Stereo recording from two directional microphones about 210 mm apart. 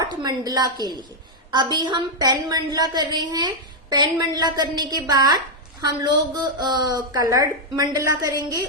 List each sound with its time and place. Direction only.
0.0 s a woman's voice: 20° right (ahead or behind)